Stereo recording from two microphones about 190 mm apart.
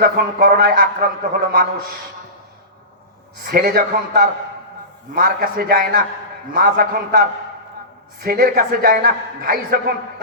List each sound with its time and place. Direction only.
0.0 s a man's voice: 55° right (ahead or behind)
3.4 s a man's voice: 55° right (ahead or behind)